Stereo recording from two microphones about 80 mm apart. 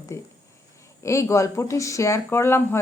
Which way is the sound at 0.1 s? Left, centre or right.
Left.